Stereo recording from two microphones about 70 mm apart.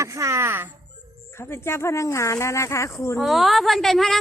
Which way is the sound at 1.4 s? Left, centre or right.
Left.